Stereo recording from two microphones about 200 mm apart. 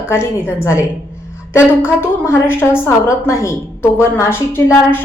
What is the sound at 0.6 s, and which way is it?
A woman's voice, 15° left (ahead or behind).